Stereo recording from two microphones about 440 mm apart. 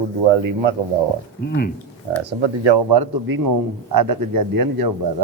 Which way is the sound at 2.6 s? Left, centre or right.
Right.